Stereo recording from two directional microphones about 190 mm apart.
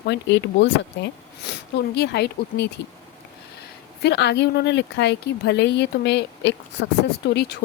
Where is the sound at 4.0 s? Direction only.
60° left (ahead or behind).